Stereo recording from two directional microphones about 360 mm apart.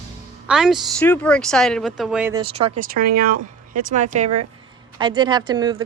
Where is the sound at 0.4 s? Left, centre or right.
Centre.